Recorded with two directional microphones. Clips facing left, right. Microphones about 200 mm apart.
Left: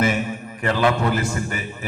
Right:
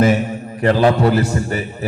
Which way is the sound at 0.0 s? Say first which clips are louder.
Right 6 dB; 35° right (ahead or behind).